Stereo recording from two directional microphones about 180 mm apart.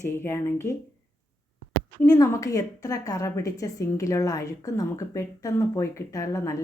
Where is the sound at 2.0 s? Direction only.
20° left (ahead or behind).